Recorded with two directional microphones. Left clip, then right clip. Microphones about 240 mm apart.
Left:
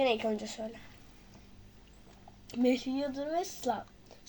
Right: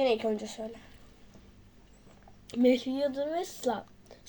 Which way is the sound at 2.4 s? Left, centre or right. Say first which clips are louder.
Right 4 dB; centre.